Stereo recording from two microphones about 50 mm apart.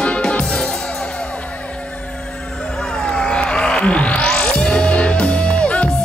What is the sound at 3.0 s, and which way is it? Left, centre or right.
Music, centre.